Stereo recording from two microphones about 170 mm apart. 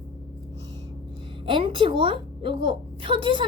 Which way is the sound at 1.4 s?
30° right (ahead or behind).